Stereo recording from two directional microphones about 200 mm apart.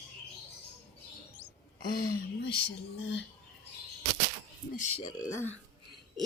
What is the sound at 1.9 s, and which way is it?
Speech, 45° left (ahead or behind).